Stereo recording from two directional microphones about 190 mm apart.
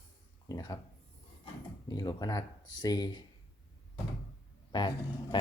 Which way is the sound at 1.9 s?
20° left (ahead or behind).